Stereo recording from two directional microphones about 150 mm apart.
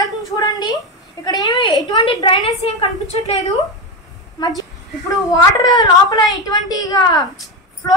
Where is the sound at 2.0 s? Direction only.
40° left (ahead or behind).